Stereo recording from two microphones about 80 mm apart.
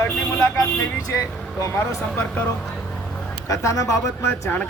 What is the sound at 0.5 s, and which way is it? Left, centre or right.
Speech, left.